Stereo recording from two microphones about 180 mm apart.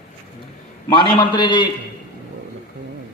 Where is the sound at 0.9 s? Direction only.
25° left (ahead or behind).